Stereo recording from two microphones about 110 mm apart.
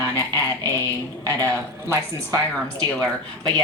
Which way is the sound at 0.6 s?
20° left (ahead or behind).